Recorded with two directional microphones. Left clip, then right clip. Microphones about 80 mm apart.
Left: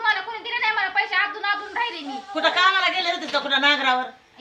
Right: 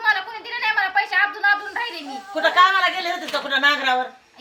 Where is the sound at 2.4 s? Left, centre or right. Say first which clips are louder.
Right 3 dB; left.